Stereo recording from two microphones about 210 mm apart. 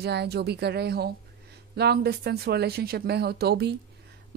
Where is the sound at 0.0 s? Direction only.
50° right (ahead or behind).